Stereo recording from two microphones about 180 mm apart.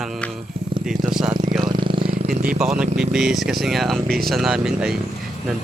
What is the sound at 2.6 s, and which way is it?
Speech, 5° right (ahead or behind).